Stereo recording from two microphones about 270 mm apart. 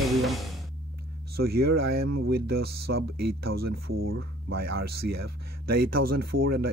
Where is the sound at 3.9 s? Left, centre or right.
Right.